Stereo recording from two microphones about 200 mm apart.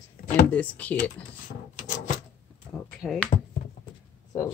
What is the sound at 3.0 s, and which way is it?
Speech, centre (ahead or behind).